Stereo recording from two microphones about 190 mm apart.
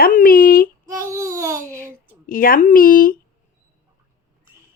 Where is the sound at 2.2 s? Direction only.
50° left (ahead or behind).